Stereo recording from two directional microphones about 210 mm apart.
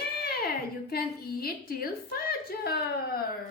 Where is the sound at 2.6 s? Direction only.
50° left (ahead or behind).